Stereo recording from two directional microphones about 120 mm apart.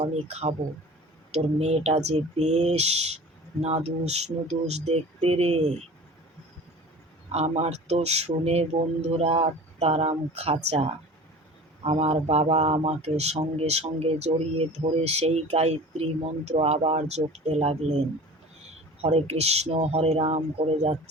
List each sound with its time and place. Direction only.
0.0 s speech: 60° right (ahead or behind)
7.3 s speech: 65° right (ahead or behind)
19.0 s speech: 60° right (ahead or behind)